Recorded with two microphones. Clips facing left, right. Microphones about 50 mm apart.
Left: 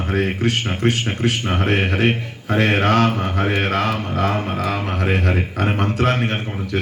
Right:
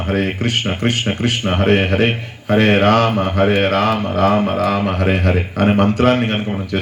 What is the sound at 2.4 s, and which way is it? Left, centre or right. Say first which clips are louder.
Speech: right 5 dB; right.